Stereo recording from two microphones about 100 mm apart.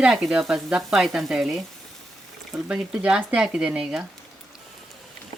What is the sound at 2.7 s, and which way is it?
Speech, 10° right (ahead or behind).